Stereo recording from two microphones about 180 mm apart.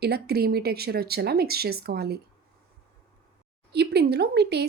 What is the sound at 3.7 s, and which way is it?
Speech, 65° right (ahead or behind).